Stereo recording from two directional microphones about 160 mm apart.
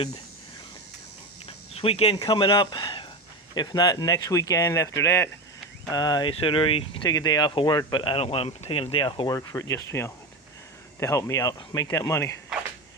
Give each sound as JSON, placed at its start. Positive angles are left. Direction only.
{"t": 1.5, "sound": "cricket", "side_deg": 35}
{"t": 2.1, "sound": "speech", "side_deg": 30}